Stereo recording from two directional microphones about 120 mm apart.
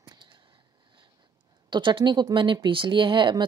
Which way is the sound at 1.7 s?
40° right (ahead or behind).